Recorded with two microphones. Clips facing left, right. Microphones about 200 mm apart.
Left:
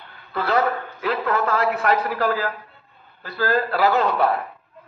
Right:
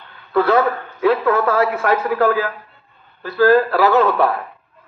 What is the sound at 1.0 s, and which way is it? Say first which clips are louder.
A man's voice: right 7 dB; 55° right (ahead or behind).